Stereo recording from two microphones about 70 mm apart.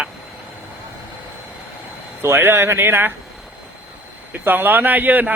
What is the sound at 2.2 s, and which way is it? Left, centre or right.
Speech, right.